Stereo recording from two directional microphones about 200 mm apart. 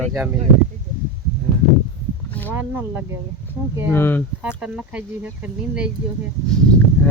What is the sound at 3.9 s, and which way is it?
Speech, 10° left (ahead or behind).